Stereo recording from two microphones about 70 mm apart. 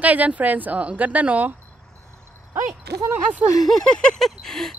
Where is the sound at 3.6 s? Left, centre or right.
Centre.